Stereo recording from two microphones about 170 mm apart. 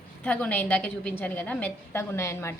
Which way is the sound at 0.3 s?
5° left (ahead or behind).